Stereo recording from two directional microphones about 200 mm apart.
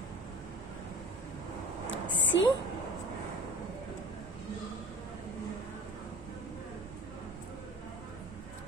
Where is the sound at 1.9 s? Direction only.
70° left (ahead or behind).